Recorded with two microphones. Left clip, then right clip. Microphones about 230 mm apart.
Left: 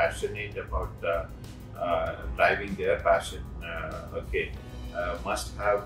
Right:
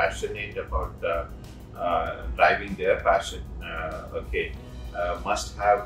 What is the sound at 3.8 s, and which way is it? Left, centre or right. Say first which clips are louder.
Speech: right 3 dB; centre.